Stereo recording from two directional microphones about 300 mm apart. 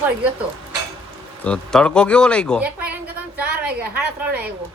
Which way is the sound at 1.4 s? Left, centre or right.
Centre.